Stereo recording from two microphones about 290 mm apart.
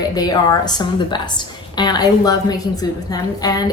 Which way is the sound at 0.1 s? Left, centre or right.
Centre.